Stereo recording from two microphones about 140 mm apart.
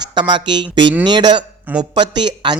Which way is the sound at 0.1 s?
30° right (ahead or behind).